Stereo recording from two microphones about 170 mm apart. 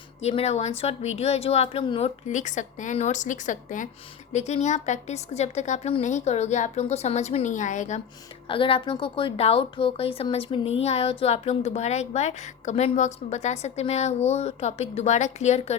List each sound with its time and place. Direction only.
0.2 s speech: 40° left (ahead or behind)
8.4 s speech: 30° left (ahead or behind)